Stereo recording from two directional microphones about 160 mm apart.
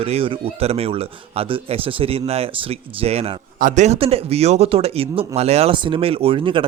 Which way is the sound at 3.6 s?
50° right (ahead or behind).